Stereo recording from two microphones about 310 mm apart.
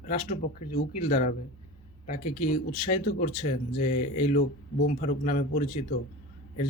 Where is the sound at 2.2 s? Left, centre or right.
Left.